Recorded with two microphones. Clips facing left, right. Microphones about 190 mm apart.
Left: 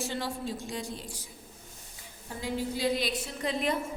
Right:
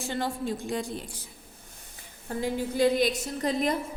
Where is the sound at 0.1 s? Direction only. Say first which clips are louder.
Right 4 dB; 55° right (ahead or behind).